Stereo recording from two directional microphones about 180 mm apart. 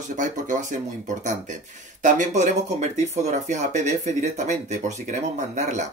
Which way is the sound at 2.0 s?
40° right (ahead or behind).